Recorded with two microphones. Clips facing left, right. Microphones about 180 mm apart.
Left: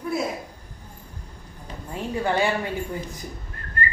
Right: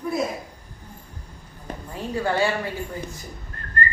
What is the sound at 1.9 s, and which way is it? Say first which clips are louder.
Speech: even; 20° left (ahead or behind).